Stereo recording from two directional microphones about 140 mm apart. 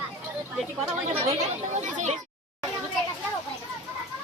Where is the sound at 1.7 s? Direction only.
60° right (ahead or behind).